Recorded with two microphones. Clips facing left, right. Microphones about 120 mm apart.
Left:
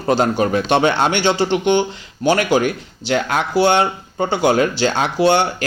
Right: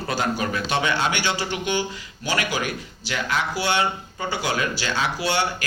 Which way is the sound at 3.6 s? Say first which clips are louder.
Left 8 dB; 30° left (ahead or behind).